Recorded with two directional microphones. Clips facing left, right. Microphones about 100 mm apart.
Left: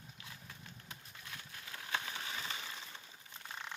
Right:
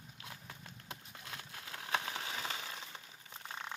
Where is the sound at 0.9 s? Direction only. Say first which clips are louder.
Right 4 dB; 75° right (ahead or behind).